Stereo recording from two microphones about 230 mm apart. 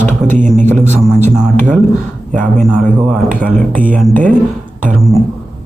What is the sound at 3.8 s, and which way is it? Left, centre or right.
Speech, right.